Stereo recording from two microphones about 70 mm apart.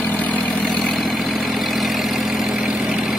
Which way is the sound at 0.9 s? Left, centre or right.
Centre.